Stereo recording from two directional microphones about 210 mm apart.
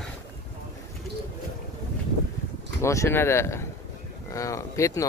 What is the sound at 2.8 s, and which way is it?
Speech, 15° left (ahead or behind).